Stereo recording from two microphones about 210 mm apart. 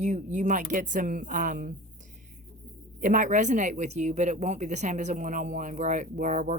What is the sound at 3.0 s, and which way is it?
Speech, 40° right (ahead or behind).